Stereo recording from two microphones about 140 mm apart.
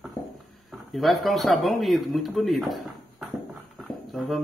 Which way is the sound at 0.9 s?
Centre (ahead or behind).